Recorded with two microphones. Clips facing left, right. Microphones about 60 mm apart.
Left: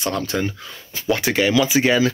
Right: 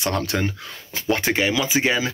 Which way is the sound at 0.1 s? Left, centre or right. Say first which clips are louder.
Even; right.